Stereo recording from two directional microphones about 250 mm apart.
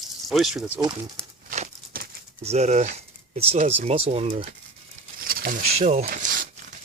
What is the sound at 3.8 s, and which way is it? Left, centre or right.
Speech, right.